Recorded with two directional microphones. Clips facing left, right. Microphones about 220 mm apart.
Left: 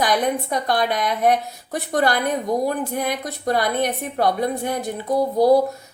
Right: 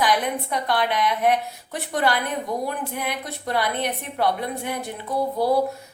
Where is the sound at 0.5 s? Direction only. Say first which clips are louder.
Left 2 dB; 40° left (ahead or behind).